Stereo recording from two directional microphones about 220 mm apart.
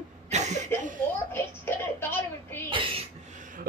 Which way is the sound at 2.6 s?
25° right (ahead or behind).